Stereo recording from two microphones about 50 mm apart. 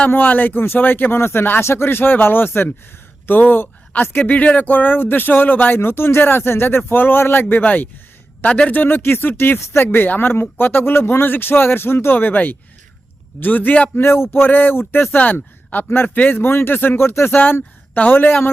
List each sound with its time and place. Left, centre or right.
0.1 s speech: left
1.6 s speech: left
7.4 s speech: left
8.4 s a man's voice: centre
8.7 s speech: left
13.9 s speech: left
15.2 s speech: left
16.4 s speech: left
17.4 s speech: left